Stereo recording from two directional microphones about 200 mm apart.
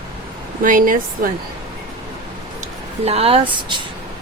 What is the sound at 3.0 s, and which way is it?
Speech, 30° right (ahead or behind).